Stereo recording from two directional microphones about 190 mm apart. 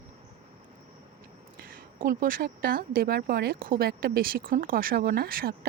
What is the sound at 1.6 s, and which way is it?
Speech, 50° right (ahead or behind).